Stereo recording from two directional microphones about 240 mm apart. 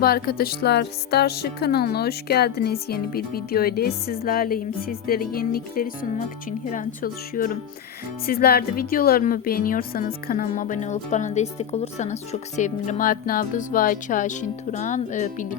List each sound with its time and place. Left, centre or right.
0.0 s a woman's voice: left